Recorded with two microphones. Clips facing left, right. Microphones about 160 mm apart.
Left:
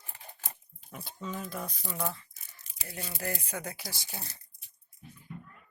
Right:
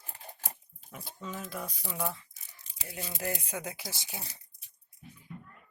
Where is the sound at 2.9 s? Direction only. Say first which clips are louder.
Right 1 dB; 20° right (ahead or behind).